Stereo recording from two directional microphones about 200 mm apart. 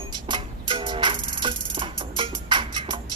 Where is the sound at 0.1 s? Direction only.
25° right (ahead or behind).